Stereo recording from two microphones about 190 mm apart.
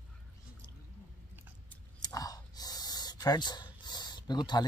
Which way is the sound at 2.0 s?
20° left (ahead or behind).